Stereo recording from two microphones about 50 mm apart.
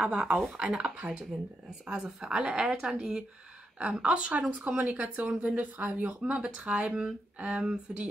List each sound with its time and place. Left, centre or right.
0.0 s speech: centre